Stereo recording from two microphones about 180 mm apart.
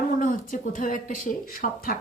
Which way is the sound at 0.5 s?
45° left (ahead or behind).